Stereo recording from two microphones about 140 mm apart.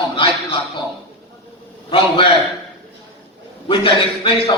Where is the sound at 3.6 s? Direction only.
40° left (ahead or behind).